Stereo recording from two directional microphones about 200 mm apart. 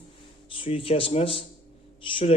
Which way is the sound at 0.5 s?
25° left (ahead or behind).